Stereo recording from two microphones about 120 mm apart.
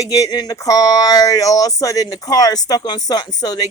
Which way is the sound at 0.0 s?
30° left (ahead or behind).